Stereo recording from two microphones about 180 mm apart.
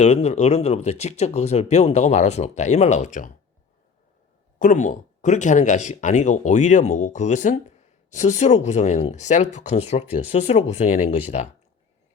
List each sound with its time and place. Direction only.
0.0 s speech: 35° left (ahead or behind)
4.6 s speech: 45° left (ahead or behind)